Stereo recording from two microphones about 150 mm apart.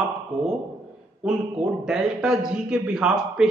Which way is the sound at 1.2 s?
5° right (ahead or behind).